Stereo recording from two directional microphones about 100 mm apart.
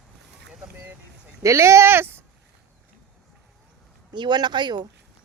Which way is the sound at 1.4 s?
30° right (ahead or behind).